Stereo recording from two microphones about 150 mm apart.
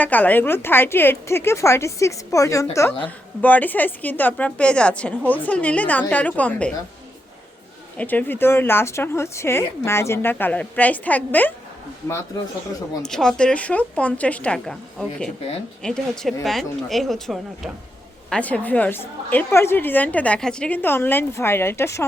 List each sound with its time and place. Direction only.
0.0 s a woman's voice: 10° left (ahead or behind)
7.9 s a woman's voice: 10° left (ahead or behind)
13.1 s a woman's voice: 5° left (ahead or behind)